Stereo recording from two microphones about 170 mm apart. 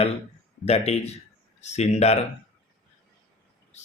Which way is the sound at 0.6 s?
40° left (ahead or behind).